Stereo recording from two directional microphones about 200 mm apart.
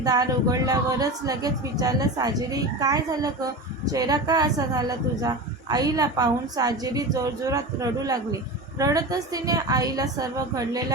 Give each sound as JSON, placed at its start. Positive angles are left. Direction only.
{"t": 0.0, "sound": "a woman's voice", "side_deg": -20}